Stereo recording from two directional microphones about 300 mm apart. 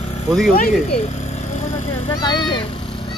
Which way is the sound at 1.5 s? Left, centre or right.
Left.